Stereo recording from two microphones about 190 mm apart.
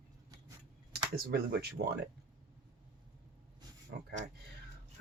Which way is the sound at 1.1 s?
55° right (ahead or behind).